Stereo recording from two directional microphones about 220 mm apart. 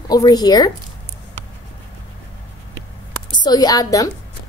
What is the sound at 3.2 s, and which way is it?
Speech, 20° left (ahead or behind).